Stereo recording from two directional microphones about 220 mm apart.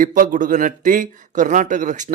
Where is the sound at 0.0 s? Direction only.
35° right (ahead or behind).